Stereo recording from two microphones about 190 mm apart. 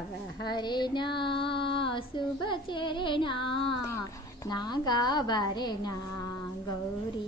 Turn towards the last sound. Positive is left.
turn(degrees=20)  # may be behind; listen again after turning